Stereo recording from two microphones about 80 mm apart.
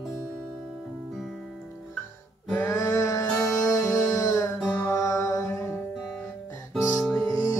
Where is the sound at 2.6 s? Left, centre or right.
Left.